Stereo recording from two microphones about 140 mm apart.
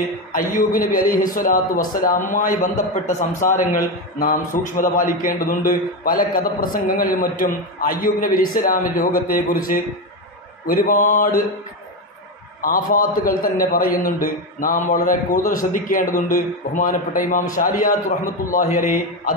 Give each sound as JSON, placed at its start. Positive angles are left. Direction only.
{"t": 0.3, "sound": "a man's voice", "side_deg": 90}
{"t": 12.6, "sound": "a man's voice", "side_deg": 90}
{"t": 14.0, "sound": "a man's voice", "side_deg": 80}